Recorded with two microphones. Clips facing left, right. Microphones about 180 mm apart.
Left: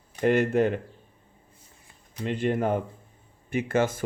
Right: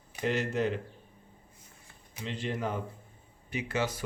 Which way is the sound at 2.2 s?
55° left (ahead or behind).